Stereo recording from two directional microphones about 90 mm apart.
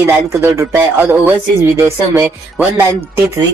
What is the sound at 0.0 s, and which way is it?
Speech, 30° right (ahead or behind).